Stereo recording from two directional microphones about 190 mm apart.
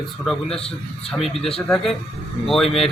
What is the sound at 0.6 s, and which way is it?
Speech, 30° left (ahead or behind).